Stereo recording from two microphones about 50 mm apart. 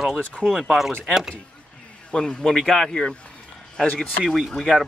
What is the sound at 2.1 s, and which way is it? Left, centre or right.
Speech, centre.